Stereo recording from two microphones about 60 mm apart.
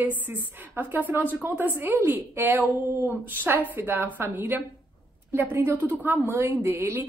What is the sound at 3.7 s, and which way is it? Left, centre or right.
A woman's voice, right.